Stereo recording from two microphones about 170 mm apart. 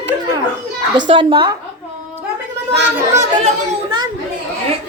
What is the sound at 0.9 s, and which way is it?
Speech, 30° right (ahead or behind).